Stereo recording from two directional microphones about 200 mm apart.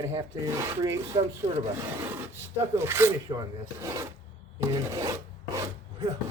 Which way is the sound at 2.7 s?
10° right (ahead or behind).